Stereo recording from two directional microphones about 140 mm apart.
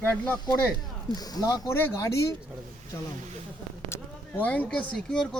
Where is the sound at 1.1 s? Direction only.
25° left (ahead or behind).